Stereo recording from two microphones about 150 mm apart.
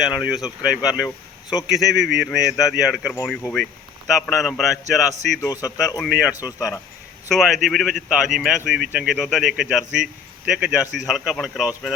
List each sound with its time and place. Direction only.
0.0 s a man's voice: 5° right (ahead or behind)
5.4 s speech: 25° left (ahead or behind)
6.0 s a man's voice: 5° right (ahead or behind)
6.6 s speech: 25° left (ahead or behind)
7.3 s a man's voice: centre (ahead or behind)